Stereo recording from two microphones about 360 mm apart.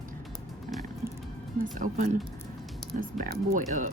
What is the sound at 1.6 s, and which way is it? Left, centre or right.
Speech, right.